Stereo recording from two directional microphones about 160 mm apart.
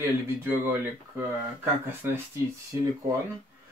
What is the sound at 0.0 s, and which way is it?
Speech, 15° right (ahead or behind).